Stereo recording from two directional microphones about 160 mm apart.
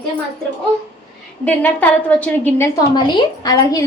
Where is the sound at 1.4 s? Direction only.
10° left (ahead or behind).